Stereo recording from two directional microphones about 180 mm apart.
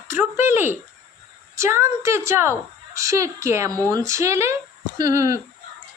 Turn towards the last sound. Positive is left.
turn(degrees=-20)  # may be behind; listen again after turning